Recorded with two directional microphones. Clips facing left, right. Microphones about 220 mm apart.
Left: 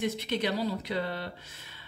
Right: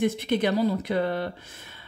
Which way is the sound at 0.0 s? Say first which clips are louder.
Right 6 dB; 50° right (ahead or behind).